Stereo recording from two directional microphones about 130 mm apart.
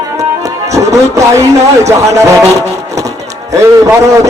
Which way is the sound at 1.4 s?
25° right (ahead or behind).